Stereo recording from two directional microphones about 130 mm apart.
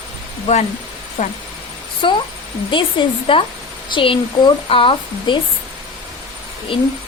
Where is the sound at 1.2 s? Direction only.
70° left (ahead or behind).